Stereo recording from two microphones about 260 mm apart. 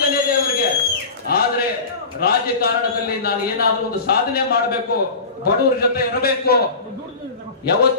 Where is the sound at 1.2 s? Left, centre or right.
Left.